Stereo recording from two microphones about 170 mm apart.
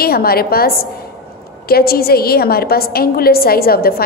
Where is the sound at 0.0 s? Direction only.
65° left (ahead or behind).